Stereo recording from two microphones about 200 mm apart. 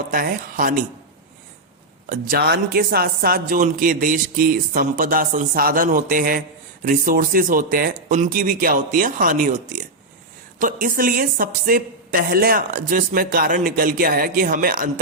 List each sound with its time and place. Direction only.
0.1 s speech: 45° right (ahead or behind)
2.0 s speech: 45° right (ahead or behind)